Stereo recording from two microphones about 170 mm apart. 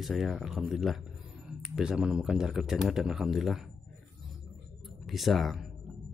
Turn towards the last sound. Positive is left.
turn(degrees=0)  # may be behind; listen again after turning